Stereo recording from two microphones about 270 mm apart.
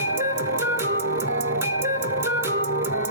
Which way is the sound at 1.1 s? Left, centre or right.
Right.